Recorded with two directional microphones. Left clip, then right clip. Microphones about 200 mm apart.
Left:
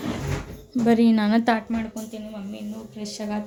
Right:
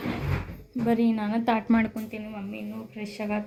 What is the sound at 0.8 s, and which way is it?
Speech, 25° left (ahead or behind).